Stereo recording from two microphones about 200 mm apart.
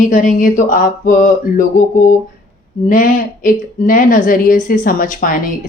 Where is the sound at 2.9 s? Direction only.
45° left (ahead or behind).